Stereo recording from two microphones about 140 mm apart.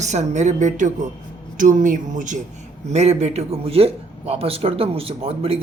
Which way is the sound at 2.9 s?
50° right (ahead or behind).